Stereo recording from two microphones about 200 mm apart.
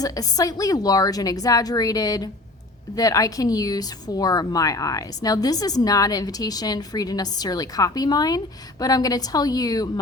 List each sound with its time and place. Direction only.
0.0 s a woman's voice: 20° left (ahead or behind)